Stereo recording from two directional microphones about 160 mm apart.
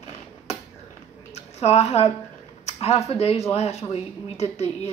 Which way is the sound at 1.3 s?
40° left (ahead or behind).